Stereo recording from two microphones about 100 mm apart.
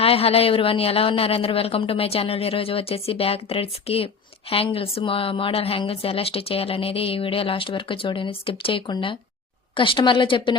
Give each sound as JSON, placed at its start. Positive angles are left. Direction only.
{"t": 0.0, "sound": "a woman's voice", "side_deg": 75}